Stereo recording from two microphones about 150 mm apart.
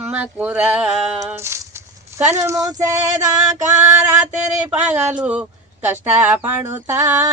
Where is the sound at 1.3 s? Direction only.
15° right (ahead or behind).